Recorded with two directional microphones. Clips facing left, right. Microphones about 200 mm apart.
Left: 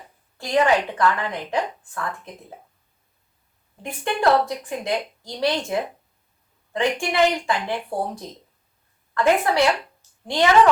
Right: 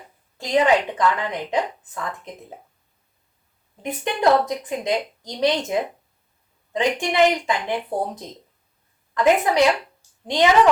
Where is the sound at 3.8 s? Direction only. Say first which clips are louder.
Right 1 dB; 20° right (ahead or behind).